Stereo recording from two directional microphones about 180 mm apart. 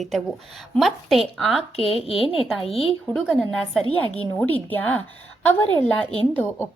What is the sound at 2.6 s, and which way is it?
Speech, 35° left (ahead or behind).